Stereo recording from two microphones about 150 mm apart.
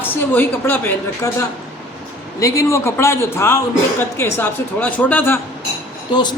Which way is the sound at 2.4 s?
20° left (ahead or behind).